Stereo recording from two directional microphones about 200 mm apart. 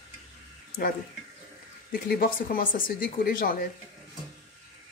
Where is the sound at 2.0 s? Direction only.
45° left (ahead or behind).